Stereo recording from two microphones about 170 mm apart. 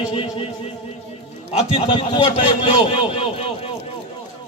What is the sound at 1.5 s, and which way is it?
A man's voice, 35° left (ahead or behind).